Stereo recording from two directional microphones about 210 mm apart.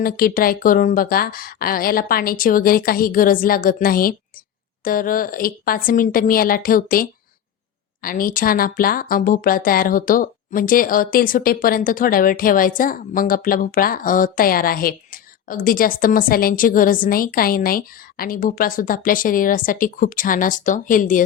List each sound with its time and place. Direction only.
0.0 s a woman's voice: 45° left (ahead or behind)